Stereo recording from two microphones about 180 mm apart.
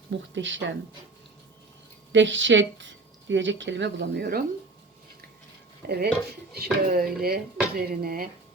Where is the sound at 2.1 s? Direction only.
90° right; by 4.4 s 65° right (ahead or behind).